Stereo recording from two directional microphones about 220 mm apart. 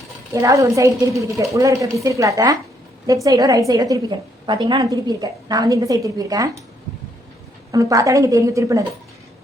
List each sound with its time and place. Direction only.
0.3 s a woman's voice: 15° right (ahead or behind)
7.7 s a woman's voice: 15° right (ahead or behind)